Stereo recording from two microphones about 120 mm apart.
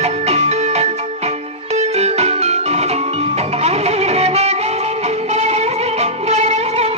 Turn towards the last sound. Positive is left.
turn(degrees=-65)  # may be behind; listen again after turning